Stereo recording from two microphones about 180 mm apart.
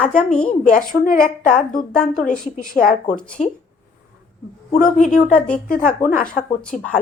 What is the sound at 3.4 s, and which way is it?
Speech, centre (ahead or behind).